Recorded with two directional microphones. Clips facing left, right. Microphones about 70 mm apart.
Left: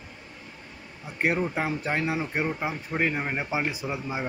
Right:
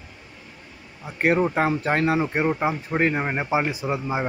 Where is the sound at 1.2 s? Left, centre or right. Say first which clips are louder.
Right 6 dB; right.